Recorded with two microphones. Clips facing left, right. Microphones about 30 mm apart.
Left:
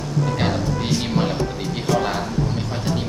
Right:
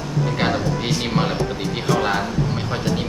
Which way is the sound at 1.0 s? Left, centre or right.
Right.